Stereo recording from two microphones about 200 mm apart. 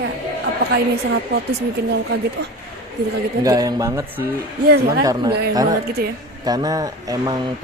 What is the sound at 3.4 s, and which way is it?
Speech, 20° right (ahead or behind).